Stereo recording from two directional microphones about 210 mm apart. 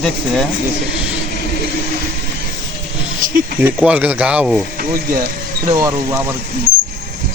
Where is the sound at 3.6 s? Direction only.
5° right (ahead or behind).